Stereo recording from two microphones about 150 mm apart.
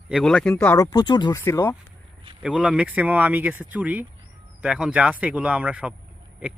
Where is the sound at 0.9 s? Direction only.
30° left (ahead or behind).